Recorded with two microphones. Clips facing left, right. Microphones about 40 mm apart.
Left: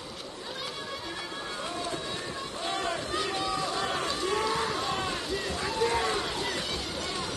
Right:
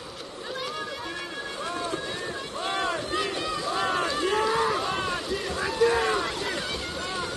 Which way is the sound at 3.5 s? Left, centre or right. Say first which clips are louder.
Right 3 dB; right.